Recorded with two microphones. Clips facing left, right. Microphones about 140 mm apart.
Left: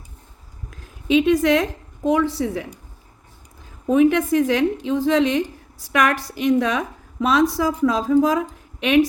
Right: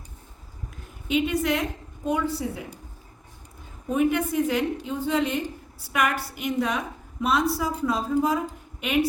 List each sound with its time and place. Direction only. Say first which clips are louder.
1.0 s a woman's voice: left 8 dB; 90° left
3.8 s a woman's voice: left 7 dB; 90° left